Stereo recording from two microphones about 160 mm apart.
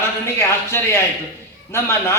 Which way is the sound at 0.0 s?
15° left (ahead or behind).